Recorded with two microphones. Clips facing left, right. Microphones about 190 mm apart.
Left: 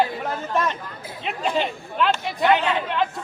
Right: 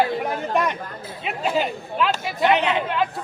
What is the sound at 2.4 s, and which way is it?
Speech, 20° right (ahead or behind).